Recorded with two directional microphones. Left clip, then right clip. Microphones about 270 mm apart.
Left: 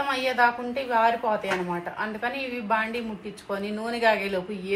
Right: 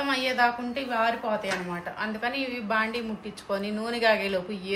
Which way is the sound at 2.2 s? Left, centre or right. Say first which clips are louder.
Right 1 dB; centre.